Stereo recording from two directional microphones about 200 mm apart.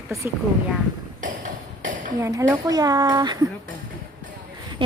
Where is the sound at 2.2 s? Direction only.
15° right (ahead or behind).